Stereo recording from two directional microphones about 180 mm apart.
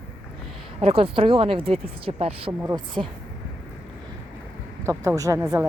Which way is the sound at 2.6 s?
15° right (ahead or behind).